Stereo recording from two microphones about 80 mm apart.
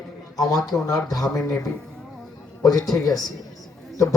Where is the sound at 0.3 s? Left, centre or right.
Left.